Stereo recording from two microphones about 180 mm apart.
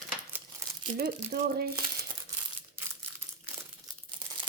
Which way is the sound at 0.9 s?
60° right (ahead or behind).